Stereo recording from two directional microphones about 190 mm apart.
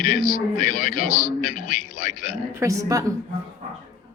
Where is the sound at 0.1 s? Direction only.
50° left (ahead or behind).